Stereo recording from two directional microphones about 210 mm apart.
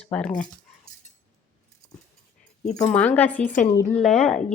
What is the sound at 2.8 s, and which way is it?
Speech, 5° left (ahead or behind).